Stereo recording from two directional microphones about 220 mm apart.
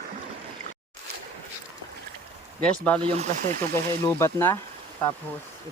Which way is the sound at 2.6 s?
5° left (ahead or behind).